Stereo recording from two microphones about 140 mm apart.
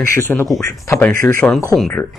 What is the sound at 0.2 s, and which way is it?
Speech, 15° left (ahead or behind).